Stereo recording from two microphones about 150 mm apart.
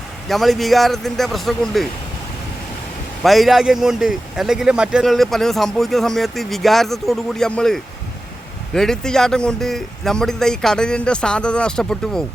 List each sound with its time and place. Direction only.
0.3 s speech: centre (ahead or behind)
3.2 s speech: centre (ahead or behind)